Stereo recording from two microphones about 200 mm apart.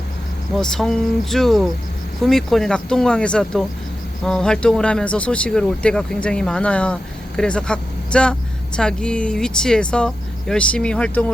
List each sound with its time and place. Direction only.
0.5 s speech: centre (ahead or behind)